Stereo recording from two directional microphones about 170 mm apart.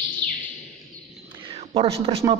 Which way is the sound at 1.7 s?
35° right (ahead or behind).